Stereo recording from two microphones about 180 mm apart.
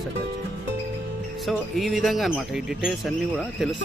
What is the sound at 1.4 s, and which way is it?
Speech, centre (ahead or behind).